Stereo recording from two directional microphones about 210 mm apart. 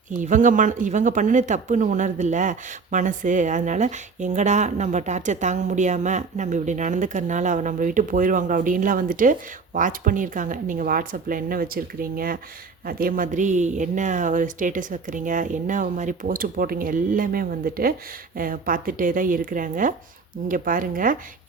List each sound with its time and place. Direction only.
0.2 s speech: 40° right (ahead or behind)